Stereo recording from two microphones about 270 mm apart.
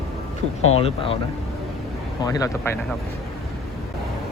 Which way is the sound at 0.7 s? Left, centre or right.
Left.